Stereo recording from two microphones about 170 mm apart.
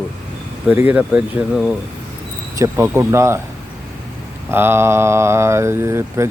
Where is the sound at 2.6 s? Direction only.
15° right (ahead or behind).